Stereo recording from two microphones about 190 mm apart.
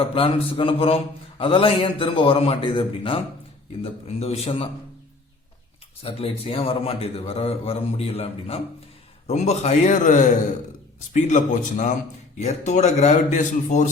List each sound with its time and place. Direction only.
0.0 s speech: 30° left (ahead or behind)
4.2 s a man's voice: 35° left (ahead or behind)
6.0 s a man's voice: 30° left (ahead or behind)